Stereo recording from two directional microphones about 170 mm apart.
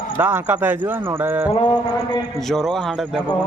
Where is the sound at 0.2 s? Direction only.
15° right (ahead or behind).